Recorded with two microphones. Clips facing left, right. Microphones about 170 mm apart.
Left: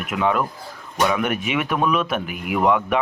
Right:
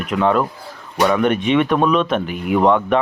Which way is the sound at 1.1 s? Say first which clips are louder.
Right 6 dB; centre (ahead or behind).